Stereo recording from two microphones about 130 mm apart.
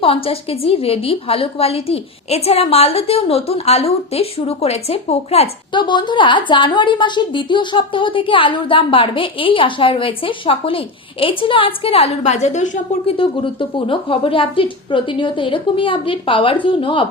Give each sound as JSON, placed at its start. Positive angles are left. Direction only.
{"t": 0.0, "sound": "a woman's voice", "side_deg": 45}
{"t": 5.7, "sound": "a woman's voice", "side_deg": 35}
{"t": 13.1, "sound": "a woman's voice", "side_deg": 40}